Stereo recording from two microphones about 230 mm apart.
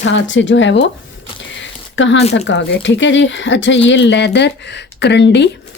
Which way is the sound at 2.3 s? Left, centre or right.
Left.